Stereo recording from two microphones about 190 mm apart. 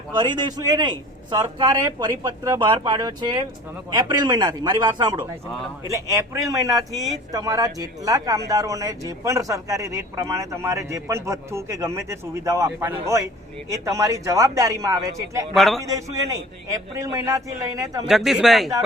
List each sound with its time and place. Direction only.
0.1 s a man's voice: 25° right (ahead or behind)
15.5 s speech: centre (ahead or behind)
16.1 s a man's voice: 15° right (ahead or behind)
18.1 s speech: centre (ahead or behind)